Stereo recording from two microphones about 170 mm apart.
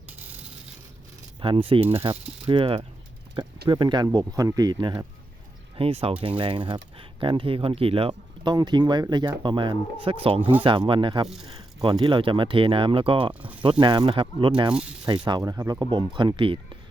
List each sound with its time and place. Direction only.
1.4 s speech: 30° right (ahead or behind)
14.7 s speech: 5° right (ahead or behind)
15.3 s speech: 20° right (ahead or behind)